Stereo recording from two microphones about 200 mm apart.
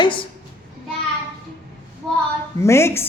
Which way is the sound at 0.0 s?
25° left (ahead or behind).